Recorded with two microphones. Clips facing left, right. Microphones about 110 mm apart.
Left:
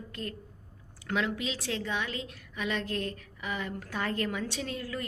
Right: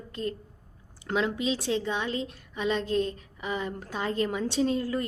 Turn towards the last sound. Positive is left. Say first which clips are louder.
# right 9 dB
turn(degrees=-30)  # may be behind; listen again after turning